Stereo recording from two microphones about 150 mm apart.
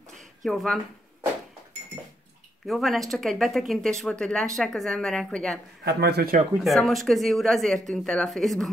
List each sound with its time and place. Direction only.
0.4 s speech: centre (ahead or behind)
2.6 s speech: centre (ahead or behind)
5.9 s speech: 90° right
6.6 s speech: centre (ahead or behind)